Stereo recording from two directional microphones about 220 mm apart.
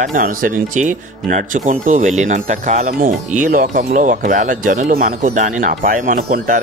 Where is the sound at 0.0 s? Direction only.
35° right (ahead or behind).